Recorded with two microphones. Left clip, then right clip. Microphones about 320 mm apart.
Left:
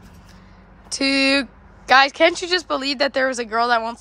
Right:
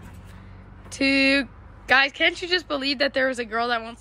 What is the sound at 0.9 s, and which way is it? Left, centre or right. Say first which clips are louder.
Speech: left 2 dB; centre.